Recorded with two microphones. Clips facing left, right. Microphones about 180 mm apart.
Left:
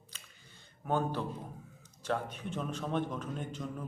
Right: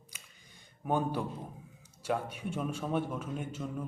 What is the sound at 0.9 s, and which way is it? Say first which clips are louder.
A man's voice: right 1 dB; 10° right (ahead or behind).